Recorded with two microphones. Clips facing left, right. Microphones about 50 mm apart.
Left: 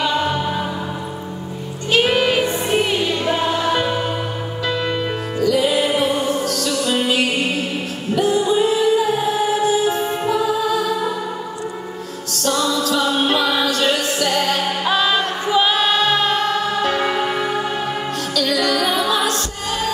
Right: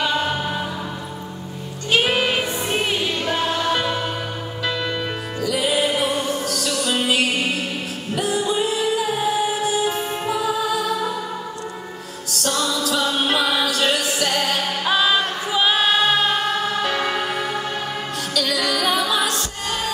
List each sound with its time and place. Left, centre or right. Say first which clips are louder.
0.0 s music: left 2 dB; centre
1.9 s music: left 3 dB; centre
5.4 s music: left 4 dB; centre
12.4 s music: left 4 dB; centre